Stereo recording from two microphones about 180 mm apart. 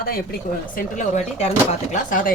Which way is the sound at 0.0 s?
55° left (ahead or behind).